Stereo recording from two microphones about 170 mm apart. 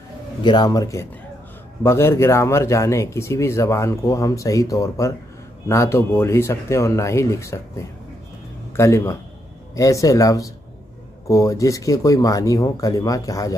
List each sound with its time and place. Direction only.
0.4 s speech: 25° left (ahead or behind)
8.7 s speech: 15° left (ahead or behind)